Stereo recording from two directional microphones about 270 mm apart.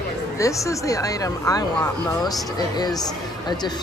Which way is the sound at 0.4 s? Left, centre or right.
Centre.